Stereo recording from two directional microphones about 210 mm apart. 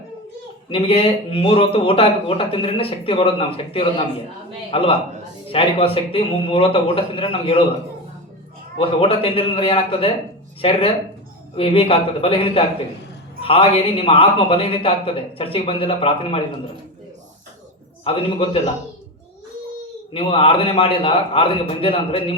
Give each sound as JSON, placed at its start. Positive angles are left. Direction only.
{"t": 0.7, "sound": "a man's voice", "side_deg": 25}
{"t": 8.8, "sound": "a man's voice", "side_deg": 25}
{"t": 18.0, "sound": "a man's voice", "side_deg": 25}
{"t": 20.1, "sound": "a man's voice", "side_deg": 25}